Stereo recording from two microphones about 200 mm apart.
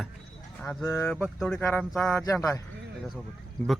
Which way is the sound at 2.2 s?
15° left (ahead or behind).